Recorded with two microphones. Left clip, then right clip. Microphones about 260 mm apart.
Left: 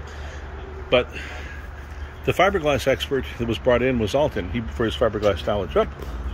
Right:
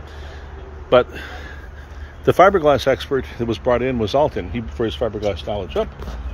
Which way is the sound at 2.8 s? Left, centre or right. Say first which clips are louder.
Right 3 dB; centre.